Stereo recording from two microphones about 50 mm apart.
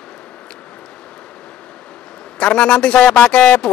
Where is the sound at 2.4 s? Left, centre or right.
Centre.